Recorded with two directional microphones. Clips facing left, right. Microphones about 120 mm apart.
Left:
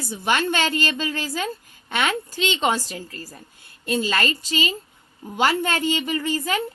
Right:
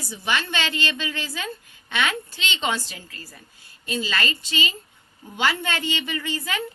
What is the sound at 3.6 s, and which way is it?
A woman's voice, 55° left (ahead or behind).